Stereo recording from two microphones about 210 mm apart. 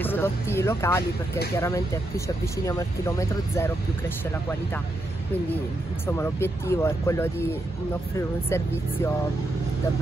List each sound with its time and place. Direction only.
0.0 s speech: 10° left (ahead or behind)
6.0 s speech: 10° left (ahead or behind)
8.5 s speech: 10° left (ahead or behind)